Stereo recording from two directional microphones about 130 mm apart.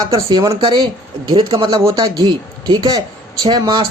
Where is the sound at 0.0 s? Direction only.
30° right (ahead or behind).